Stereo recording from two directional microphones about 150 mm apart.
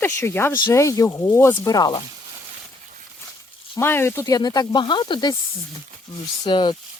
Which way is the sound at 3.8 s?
15° left (ahead or behind).